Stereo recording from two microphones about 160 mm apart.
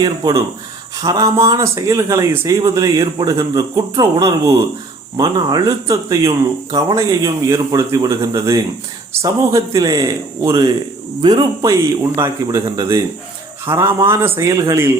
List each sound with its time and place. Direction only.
0.2 s speech: 25° right (ahead or behind)
13.7 s speech: 15° right (ahead or behind)